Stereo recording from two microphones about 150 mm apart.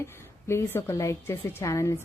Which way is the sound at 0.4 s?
15° left (ahead or behind).